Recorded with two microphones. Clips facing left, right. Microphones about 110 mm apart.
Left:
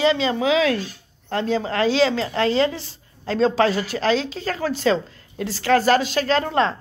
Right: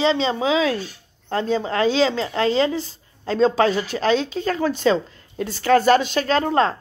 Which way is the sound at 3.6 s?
40° left (ahead or behind).